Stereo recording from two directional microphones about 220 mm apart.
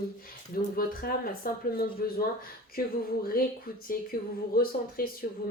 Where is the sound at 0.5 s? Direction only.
40° left (ahead or behind).